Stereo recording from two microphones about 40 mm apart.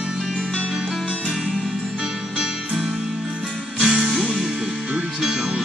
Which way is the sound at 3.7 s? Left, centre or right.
Centre.